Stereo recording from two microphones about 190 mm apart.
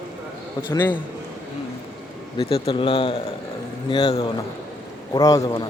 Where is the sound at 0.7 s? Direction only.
10° left (ahead or behind).